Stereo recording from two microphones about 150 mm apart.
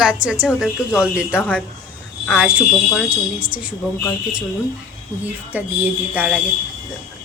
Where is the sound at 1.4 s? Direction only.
10° left (ahead or behind).